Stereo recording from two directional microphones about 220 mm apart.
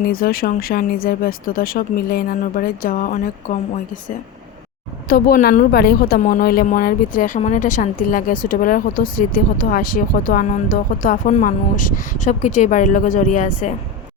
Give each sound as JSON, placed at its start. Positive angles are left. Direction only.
{"t": 0.0, "sound": "a woman's voice", "side_deg": 40}
{"t": 5.0, "sound": "a woman's voice", "side_deg": 40}